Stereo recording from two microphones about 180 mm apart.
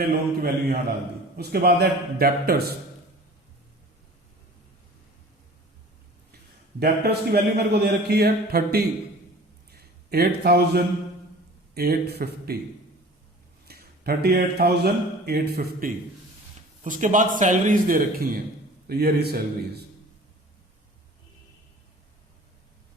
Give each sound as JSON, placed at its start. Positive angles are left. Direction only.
{"t": 0.0, "sound": "a man's voice", "side_deg": -60}
{"t": 6.7, "sound": "a man's voice", "side_deg": -60}
{"t": 9.7, "sound": "a sound", "side_deg": -60}
{"t": 11.7, "sound": "a man's voice", "side_deg": -60}
{"t": 13.7, "sound": "a man's voice", "side_deg": -60}
{"t": 16.8, "sound": "a man's voice", "side_deg": -45}